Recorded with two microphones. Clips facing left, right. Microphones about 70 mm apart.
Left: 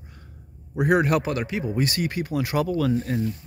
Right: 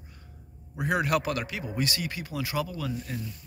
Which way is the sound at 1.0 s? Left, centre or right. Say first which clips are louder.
Left 4 dB; left.